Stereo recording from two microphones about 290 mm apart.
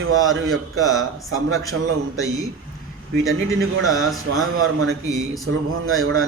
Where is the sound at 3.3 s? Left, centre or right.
Right.